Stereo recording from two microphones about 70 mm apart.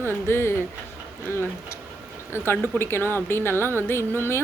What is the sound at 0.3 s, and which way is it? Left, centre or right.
Speech, left.